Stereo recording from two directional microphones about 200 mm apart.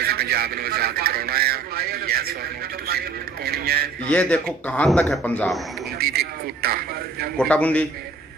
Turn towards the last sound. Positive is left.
turn(degrees=5)  # may be behind; listen again after turning